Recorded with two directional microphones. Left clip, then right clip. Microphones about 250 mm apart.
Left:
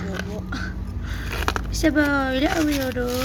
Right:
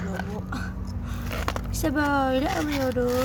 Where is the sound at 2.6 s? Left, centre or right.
Left.